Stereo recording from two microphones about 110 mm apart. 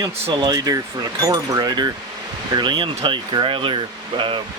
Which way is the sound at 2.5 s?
45° right (ahead or behind).